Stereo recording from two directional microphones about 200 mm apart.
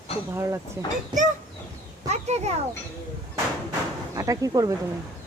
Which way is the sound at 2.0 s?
35° right (ahead or behind).